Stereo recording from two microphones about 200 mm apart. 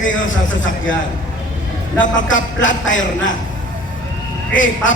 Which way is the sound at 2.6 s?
70° left (ahead or behind).